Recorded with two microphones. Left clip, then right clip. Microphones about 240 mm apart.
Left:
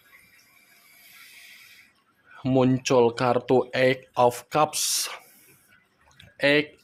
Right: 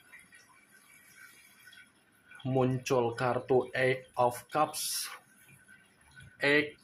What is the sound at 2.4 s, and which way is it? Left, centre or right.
Speech, left.